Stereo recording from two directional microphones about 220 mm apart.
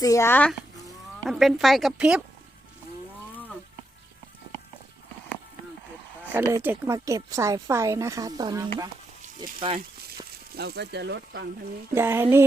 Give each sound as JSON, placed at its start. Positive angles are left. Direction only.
{"t": 0.0, "sound": "a child's voice", "side_deg": 15}
{"t": 6.5, "sound": "speech", "side_deg": -10}
{"t": 10.6, "sound": "speech", "side_deg": -45}
{"t": 11.9, "sound": "speech", "side_deg": -10}